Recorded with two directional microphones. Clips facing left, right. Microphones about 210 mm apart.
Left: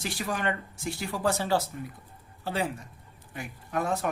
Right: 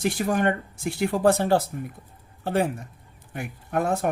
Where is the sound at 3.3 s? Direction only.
60° right (ahead or behind).